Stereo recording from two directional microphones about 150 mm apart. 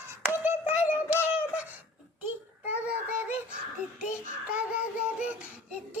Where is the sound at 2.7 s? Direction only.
10° right (ahead or behind).